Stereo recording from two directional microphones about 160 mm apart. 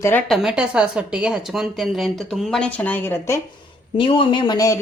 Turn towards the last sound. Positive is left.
turn(degrees=25)  # may be behind; listen again after turning